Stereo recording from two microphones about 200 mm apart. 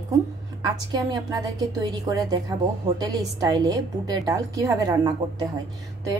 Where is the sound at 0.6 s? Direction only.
20° right (ahead or behind).